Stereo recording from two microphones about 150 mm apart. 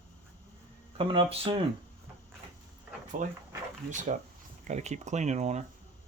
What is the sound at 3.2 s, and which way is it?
Speech, 60° right (ahead or behind).